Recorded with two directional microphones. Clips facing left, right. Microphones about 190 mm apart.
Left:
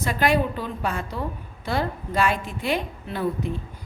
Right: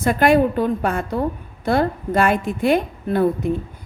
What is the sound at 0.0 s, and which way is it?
A woman's voice, 50° right (ahead or behind).